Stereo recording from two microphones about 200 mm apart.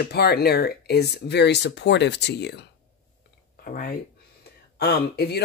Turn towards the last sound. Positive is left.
turn(degrees=55)  # may be behind; listen again after turning